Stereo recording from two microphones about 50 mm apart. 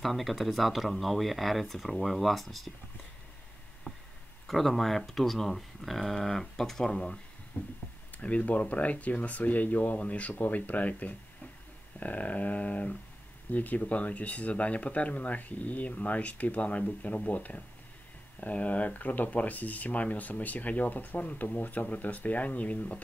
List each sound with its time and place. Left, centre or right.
0.0 s speech: centre
3.9 s a sound: left
4.5 s speech: centre
7.5 s speech: left